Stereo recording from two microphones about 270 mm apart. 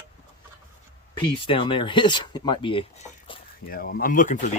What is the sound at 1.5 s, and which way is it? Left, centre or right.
Speech, centre.